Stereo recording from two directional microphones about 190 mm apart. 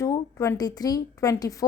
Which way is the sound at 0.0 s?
15° left (ahead or behind).